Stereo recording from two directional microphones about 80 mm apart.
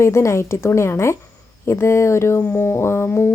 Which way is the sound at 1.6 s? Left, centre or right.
Left.